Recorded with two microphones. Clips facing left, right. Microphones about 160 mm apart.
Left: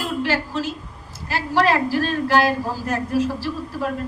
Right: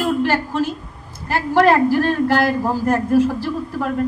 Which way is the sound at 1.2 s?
50° right (ahead or behind).